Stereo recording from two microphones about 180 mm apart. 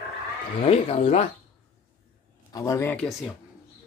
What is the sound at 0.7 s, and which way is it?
Speech, 35° left (ahead or behind).